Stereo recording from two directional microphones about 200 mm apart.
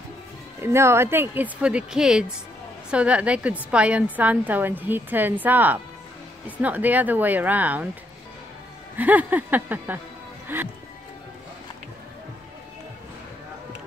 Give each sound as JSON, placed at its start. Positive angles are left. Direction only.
{"t": 0.6, "sound": "a woman's voice", "side_deg": -15}
{"t": 8.9, "sound": "a woman's voice", "side_deg": -10}